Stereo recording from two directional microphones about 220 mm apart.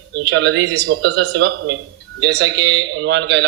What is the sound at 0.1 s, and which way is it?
A man's voice, 55° right (ahead or behind).